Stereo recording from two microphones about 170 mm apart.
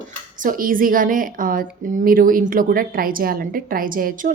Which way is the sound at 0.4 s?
55° right (ahead or behind).